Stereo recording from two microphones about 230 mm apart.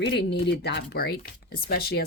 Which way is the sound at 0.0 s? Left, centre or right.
Left.